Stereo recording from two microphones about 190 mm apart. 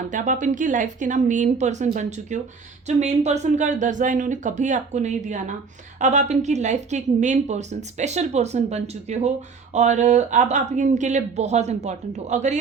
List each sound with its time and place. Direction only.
0.1 s a woman's voice: 40° right (ahead or behind)